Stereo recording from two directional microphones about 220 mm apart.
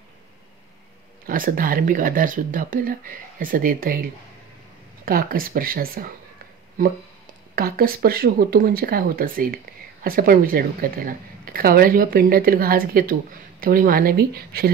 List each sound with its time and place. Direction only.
1.2 s speech: 40° right (ahead or behind)
7.5 s speech: 45° right (ahead or behind)